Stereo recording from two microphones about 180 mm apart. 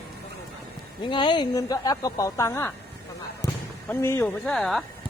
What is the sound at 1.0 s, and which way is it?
Speech, 25° left (ahead or behind).